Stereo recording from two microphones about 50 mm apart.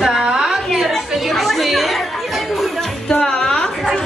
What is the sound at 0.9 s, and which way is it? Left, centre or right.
Chatter, centre.